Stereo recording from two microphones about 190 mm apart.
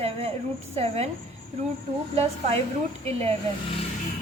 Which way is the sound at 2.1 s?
30° right (ahead or behind).